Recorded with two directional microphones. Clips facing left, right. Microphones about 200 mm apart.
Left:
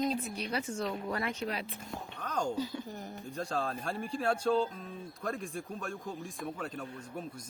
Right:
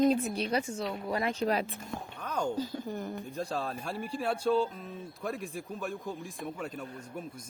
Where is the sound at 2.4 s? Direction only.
50° right (ahead or behind).